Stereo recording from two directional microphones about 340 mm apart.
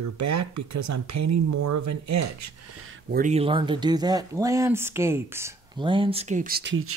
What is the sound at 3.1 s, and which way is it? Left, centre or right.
Speech, right.